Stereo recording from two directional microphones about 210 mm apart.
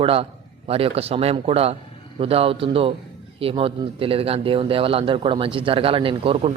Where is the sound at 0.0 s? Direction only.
25° right (ahead or behind).